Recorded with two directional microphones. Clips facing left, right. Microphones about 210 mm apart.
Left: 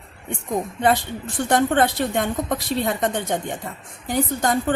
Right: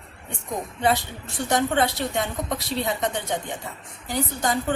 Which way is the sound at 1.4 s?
50° left (ahead or behind).